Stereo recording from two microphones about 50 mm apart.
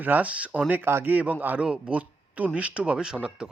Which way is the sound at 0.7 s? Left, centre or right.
Right.